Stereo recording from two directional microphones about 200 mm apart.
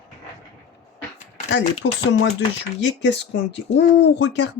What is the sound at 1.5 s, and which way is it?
Speech, 60° left (ahead or behind).